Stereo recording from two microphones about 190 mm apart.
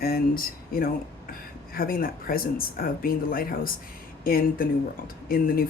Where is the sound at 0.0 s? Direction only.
50° left (ahead or behind).